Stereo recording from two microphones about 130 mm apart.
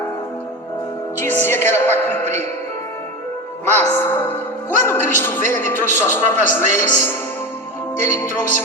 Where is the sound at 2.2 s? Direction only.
60° right (ahead or behind).